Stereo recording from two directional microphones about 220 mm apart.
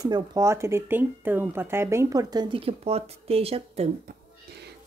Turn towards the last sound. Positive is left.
turn(degrees=-25)  # may be behind; listen again after turning